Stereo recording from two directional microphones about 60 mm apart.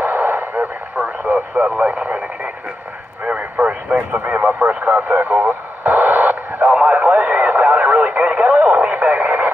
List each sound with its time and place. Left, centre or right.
0.0 s radio: right